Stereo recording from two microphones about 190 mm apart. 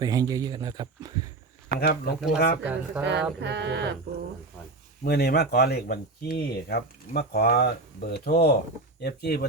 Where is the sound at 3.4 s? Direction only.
65° right (ahead or behind).